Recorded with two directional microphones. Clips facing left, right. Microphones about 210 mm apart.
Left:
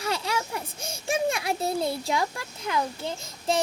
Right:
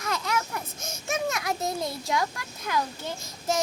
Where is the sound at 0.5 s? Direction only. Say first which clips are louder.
Left 1 dB; 30° left (ahead or behind).